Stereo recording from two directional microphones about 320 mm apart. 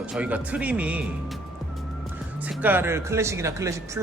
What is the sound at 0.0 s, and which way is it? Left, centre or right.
A man's voice, centre.